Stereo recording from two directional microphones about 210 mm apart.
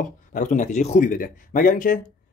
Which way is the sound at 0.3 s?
40° left (ahead or behind).